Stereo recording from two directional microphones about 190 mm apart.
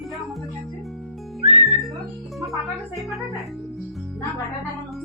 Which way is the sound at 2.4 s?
Centre (ahead or behind).